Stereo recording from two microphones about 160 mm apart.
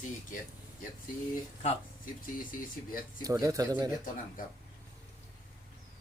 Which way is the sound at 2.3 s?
60° left (ahead or behind).